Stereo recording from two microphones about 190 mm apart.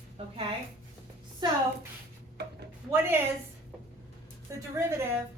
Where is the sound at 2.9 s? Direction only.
10° right (ahead or behind).